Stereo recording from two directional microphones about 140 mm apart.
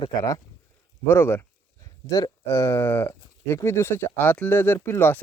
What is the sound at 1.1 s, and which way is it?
Speech, 15° left (ahead or behind).